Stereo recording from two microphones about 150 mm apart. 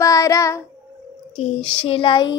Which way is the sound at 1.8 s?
35° left (ahead or behind).